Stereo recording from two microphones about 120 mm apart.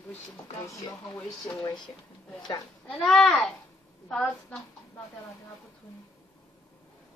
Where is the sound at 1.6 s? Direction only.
35° left (ahead or behind).